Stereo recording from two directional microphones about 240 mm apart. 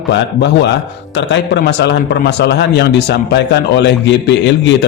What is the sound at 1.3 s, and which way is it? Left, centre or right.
A man's voice, left.